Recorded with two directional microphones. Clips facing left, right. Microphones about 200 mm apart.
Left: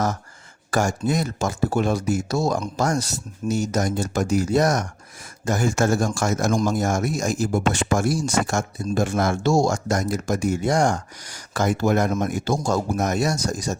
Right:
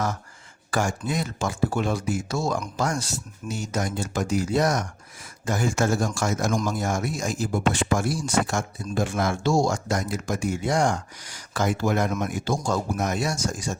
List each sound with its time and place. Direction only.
0.7 s speech: 40° left (ahead or behind)